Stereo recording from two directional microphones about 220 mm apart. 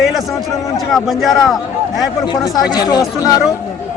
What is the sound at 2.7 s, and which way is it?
Speech, 20° left (ahead or behind).